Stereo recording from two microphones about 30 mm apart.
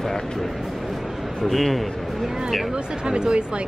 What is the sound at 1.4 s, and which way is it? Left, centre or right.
Speech, centre.